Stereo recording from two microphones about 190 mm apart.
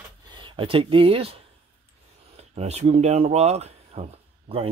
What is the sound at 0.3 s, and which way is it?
Speech, 25° right (ahead or behind).